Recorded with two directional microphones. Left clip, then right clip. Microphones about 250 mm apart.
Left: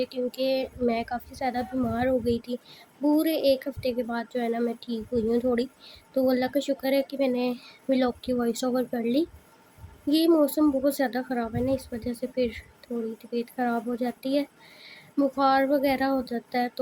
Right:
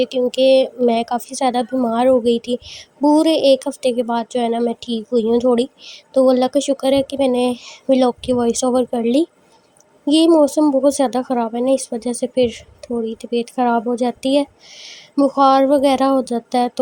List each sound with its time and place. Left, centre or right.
0.0 s a woman's voice: right